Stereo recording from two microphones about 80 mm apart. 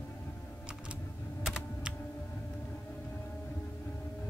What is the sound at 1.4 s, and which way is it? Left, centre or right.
Computer keyboard, centre.